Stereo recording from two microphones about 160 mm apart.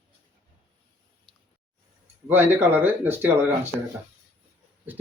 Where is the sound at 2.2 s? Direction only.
10° right (ahead or behind).